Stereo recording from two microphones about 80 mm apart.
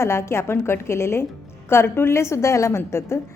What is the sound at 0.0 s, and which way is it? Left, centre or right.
A woman's voice, left.